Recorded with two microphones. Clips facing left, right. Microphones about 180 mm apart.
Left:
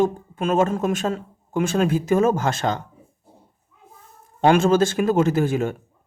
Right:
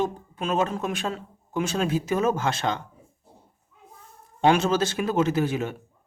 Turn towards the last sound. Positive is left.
turn(degrees=45)  # may be behind; listen again after turning